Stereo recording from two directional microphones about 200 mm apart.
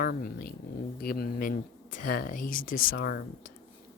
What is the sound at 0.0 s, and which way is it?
Speech, 45° left (ahead or behind).